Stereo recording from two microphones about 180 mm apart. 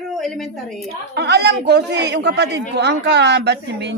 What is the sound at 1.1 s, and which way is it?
A woman's voice, 70° right (ahead or behind).